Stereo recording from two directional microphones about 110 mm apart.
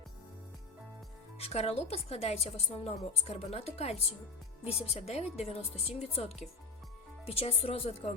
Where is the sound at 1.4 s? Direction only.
65° left (ahead or behind).